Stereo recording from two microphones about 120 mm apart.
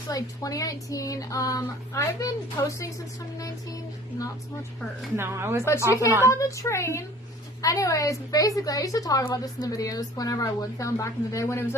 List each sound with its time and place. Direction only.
0.1 s a woman's voice: 30° left (ahead or behind)
5.1 s speech: 20° right (ahead or behind)
6.2 s a woman's voice: 25° left (ahead or behind)